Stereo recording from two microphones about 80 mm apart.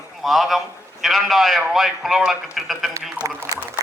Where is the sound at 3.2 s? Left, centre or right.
Centre.